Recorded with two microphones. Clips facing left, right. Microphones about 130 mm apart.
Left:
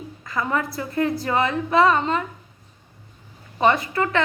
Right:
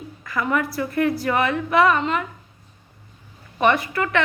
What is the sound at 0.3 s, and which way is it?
A woman's voice, 25° left (ahead or behind).